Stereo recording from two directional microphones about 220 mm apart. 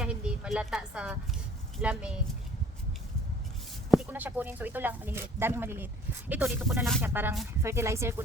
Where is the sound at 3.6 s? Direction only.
5° right (ahead or behind).